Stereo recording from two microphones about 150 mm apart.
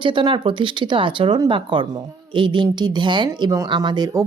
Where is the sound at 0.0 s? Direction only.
35° right (ahead or behind).